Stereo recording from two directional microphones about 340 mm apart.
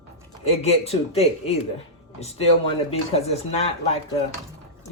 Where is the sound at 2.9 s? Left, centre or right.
Centre.